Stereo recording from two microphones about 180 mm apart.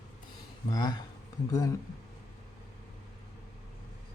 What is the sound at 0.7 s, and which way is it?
Speech, 20° left (ahead or behind).